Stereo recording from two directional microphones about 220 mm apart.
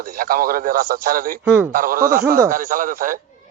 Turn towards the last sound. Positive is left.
turn(degrees=-40)  # may be behind; listen again after turning